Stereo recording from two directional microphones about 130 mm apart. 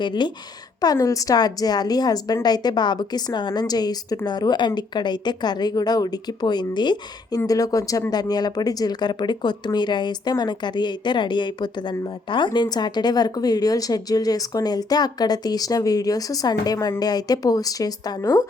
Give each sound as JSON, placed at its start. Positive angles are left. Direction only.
{"t": 0.0, "sound": "a woman's voice", "side_deg": 35}